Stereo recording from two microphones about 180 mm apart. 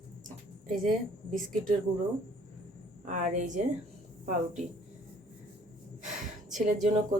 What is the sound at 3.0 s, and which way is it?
Speech, 45° right (ahead or behind).